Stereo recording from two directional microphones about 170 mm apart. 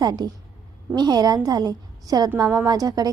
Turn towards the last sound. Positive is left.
turn(degrees=-20)  # may be behind; listen again after turning